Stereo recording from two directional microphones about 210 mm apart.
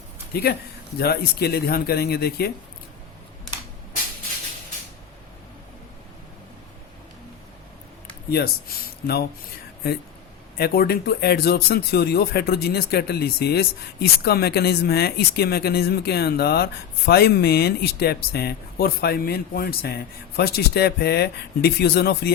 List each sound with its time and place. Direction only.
0.9 s speech: 50° left (ahead or behind)
8.3 s speech: 50° left (ahead or behind)
10.6 s speech: 45° left (ahead or behind)